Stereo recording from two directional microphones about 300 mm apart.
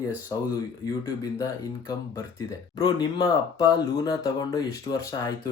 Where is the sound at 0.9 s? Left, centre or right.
Centre.